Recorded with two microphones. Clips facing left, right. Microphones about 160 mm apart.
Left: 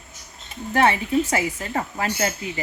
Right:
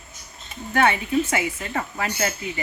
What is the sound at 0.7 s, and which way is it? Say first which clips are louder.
Speech: left 1 dB; 30° left (ahead or behind).